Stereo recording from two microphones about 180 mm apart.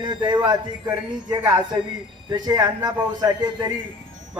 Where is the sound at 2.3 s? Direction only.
20° right (ahead or behind).